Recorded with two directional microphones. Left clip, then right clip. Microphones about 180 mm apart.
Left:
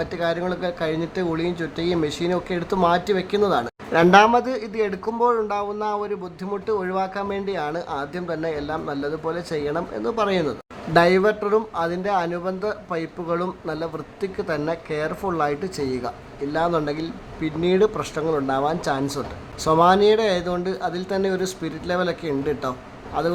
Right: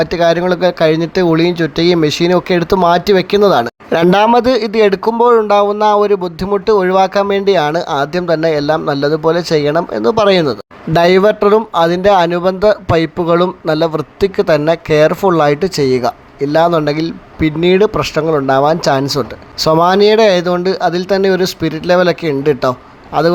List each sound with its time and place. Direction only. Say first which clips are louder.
0.0 s speech: right 12 dB; 40° right (ahead or behind)